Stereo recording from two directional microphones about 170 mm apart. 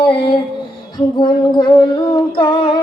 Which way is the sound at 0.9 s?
25° left (ahead or behind).